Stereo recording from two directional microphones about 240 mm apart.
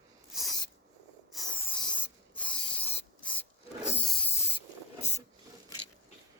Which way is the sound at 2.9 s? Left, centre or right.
Left.